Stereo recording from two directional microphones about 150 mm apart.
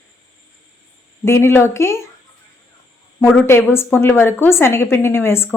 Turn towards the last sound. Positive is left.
turn(degrees=15)  # may be behind; listen again after turning